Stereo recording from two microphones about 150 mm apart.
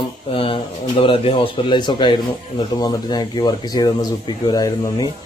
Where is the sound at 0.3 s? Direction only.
35° left (ahead or behind).